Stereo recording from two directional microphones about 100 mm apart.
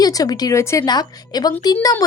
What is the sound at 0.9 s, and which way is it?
Speech, 45° left (ahead or behind).